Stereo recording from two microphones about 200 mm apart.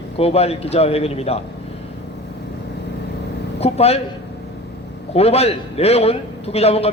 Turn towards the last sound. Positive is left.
turn(degrees=30)  # may be behind; listen again after turning